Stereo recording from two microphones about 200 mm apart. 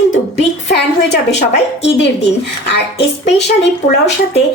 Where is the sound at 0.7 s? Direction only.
60° left (ahead or behind).